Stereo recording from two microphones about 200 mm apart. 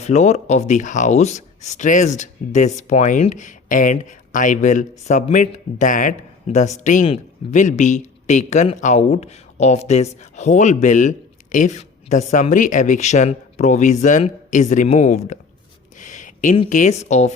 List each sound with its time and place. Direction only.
0.0 s speech: 35° left (ahead or behind)
16.0 s a sound: 40° left (ahead or behind)
16.6 s speech: 40° left (ahead or behind)